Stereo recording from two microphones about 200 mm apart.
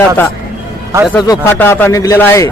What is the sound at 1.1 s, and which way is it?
Speech, 10° left (ahead or behind).